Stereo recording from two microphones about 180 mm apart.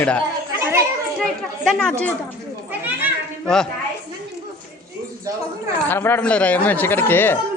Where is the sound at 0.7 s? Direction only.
10° right (ahead or behind).